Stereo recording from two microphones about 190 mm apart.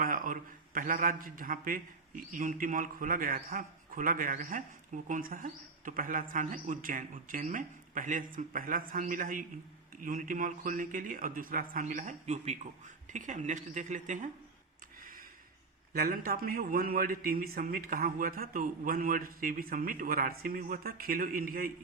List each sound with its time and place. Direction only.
0.0 s a man's voice: 45° right (ahead or behind)
15.9 s a man's voice: 50° right (ahead or behind)